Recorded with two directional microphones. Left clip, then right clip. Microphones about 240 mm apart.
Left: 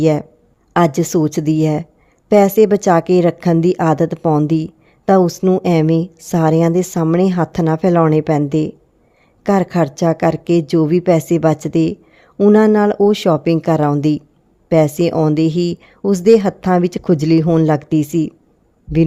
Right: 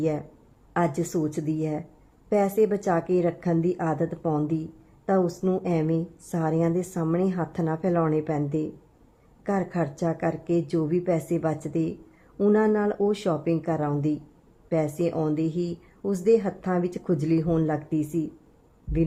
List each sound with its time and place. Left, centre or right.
0.0 s a woman's voice: left